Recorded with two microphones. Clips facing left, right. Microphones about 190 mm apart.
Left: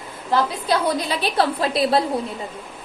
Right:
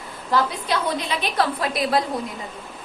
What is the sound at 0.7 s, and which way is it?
A woman's voice, 35° left (ahead or behind).